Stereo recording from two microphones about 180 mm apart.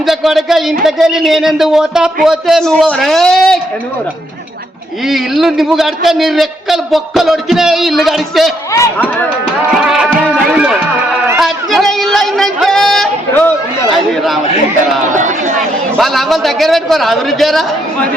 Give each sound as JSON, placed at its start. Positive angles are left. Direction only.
{"t": 0.0, "sound": "a man's voice", "side_deg": 0}
{"t": 5.0, "sound": "a man's voice", "side_deg": 0}
{"t": 8.7, "sound": "speech", "side_deg": 10}
{"t": 9.8, "sound": "music", "side_deg": 0}
{"t": 11.3, "sound": "a sound", "side_deg": 0}
{"t": 15.1, "sound": "a sound", "side_deg": -45}
{"t": 16.0, "sound": "a man's voice", "side_deg": 0}